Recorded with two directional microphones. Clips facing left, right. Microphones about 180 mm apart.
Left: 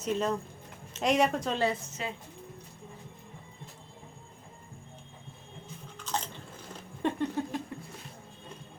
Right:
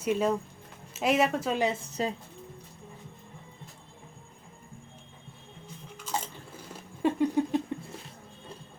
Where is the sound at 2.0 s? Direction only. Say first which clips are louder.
Right 11 dB; 40° right (ahead or behind).